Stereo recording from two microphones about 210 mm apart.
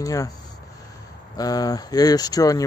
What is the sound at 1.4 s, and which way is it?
Speech, 15° left (ahead or behind).